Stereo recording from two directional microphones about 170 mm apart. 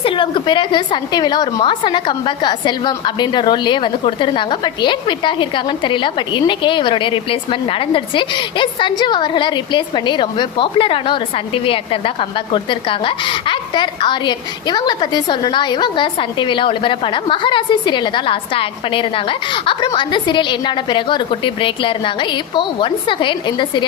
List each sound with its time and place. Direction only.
0.0 s a woman's voice: 30° left (ahead or behind)